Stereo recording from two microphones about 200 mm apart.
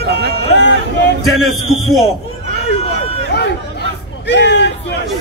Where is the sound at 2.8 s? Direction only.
30° left (ahead or behind).